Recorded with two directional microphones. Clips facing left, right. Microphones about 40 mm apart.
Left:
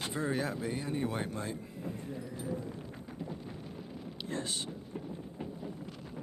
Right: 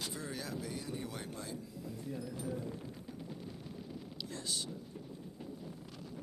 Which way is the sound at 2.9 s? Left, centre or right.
Left.